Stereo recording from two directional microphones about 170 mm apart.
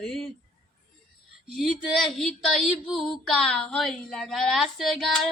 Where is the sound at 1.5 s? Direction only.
Centre (ahead or behind).